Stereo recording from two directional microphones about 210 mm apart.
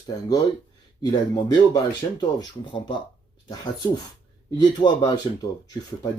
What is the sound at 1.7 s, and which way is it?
Speech, 20° left (ahead or behind).